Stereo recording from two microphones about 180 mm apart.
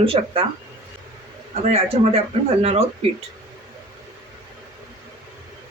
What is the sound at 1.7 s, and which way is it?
Speech, 35° right (ahead or behind).